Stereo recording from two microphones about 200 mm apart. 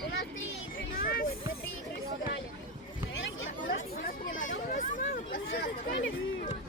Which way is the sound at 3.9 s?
40° left (ahead or behind).